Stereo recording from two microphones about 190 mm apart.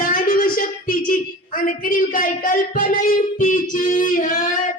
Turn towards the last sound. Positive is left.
turn(degrees=40)  # may be behind; listen again after turning